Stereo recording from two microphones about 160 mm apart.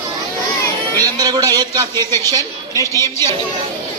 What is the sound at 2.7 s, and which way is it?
Speech, 20° left (ahead or behind).